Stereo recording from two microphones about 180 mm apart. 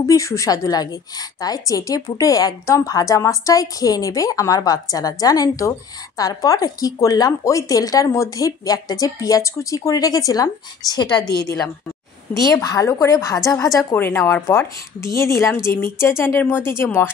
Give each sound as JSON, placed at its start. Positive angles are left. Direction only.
{"t": 0.0, "sound": "a woman's voice", "side_deg": 15}
{"t": 12.4, "sound": "a woman's voice", "side_deg": 20}